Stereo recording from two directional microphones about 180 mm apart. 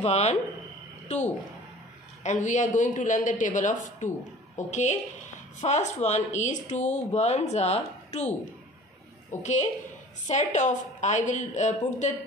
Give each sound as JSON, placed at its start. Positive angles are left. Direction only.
{"t": 0.0, "sound": "a woman's voice", "side_deg": 40}
{"t": 9.4, "sound": "speech", "side_deg": 40}